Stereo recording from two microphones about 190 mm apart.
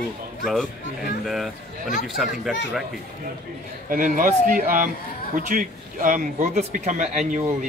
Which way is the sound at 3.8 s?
45° right (ahead or behind).